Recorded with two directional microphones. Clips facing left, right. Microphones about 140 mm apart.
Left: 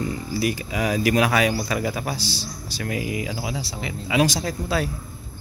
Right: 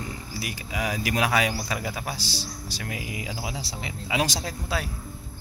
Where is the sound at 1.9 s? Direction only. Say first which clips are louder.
Left 5 dB; 5° right (ahead or behind).